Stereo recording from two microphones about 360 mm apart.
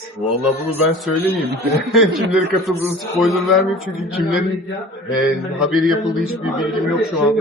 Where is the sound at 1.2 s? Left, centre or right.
Centre.